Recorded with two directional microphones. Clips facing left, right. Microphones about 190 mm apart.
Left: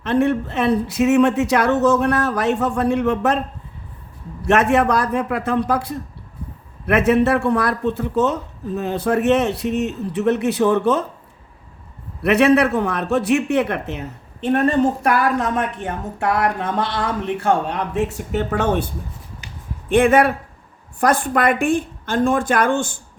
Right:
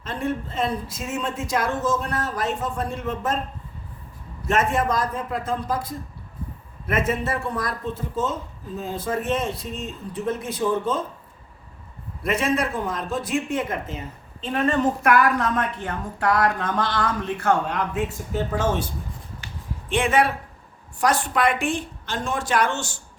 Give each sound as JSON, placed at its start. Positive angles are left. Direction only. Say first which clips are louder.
{"t": 0.0, "sound": "speech", "louder": "left 9 dB", "side_deg": 70}
{"t": 4.4, "sound": "speech", "louder": "left 6 dB", "side_deg": 70}
{"t": 12.2, "sound": "speech", "louder": "left 9 dB", "side_deg": 70}
{"t": 14.5, "sound": "a woman's voice", "louder": "left 5 dB", "side_deg": 45}
{"t": 15.4, "sound": "speech", "louder": "left 3 dB", "side_deg": 20}
{"t": 18.1, "sound": "speech", "louder": "left 4 dB", "side_deg": 70}
{"t": 19.9, "sound": "a woman's voice", "louder": "left 7 dB", "side_deg": 55}